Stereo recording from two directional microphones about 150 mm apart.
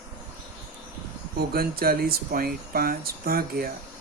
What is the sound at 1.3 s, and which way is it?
Speech, 90° right.